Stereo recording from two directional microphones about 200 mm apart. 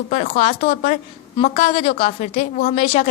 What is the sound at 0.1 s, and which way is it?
Speech, 40° left (ahead or behind).